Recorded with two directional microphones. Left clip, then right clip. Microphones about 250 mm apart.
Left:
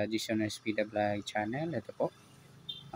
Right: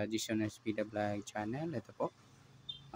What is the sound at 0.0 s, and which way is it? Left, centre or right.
Speech, centre.